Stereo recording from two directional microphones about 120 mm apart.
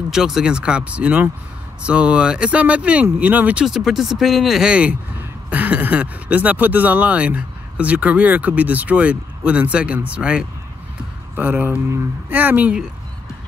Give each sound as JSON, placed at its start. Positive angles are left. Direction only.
{"t": 0.1, "sound": "speech", "side_deg": -5}